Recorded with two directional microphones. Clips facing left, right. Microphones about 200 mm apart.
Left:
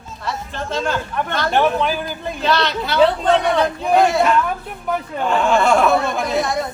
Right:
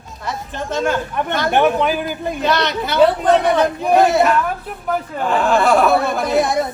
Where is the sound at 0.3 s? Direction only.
15° right (ahead or behind).